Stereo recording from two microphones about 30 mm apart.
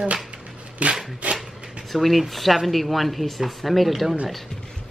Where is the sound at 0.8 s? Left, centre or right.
Right.